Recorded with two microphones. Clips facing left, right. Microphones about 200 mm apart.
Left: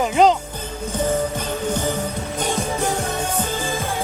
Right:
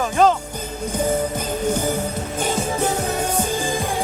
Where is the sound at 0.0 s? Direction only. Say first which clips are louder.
Left 1 dB; 15° left (ahead or behind).